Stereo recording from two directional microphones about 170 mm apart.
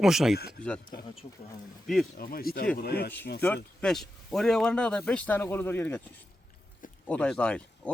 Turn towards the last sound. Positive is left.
turn(degrees=5)  # may be behind; listen again after turning